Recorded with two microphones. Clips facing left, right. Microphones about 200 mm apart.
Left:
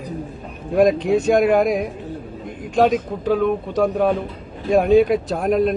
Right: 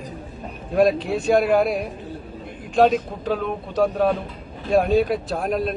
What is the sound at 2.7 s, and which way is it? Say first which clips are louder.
Speech: even; 10° left (ahead or behind).